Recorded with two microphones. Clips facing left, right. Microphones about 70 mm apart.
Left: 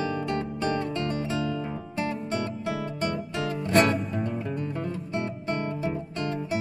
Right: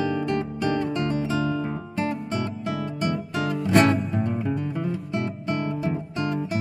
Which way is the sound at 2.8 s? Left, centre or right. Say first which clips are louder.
Right 2 dB; centre.